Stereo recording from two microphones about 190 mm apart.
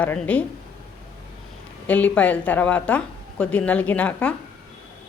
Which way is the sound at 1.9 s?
10° left (ahead or behind).